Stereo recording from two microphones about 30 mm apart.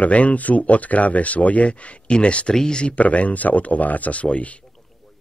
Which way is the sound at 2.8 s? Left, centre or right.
Left.